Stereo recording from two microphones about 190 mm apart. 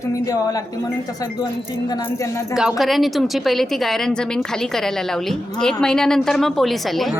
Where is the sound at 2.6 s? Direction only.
Centre (ahead or behind).